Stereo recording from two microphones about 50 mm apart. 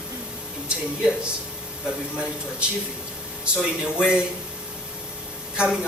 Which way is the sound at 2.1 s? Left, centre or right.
Right.